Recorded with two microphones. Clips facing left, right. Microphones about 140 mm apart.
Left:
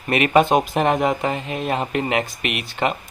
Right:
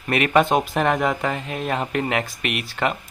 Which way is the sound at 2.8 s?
15° left (ahead or behind).